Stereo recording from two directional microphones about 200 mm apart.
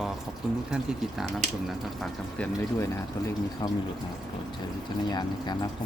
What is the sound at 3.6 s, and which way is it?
Speech, 20° left (ahead or behind).